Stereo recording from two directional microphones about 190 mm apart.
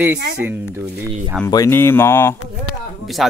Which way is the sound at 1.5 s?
15° left (ahead or behind).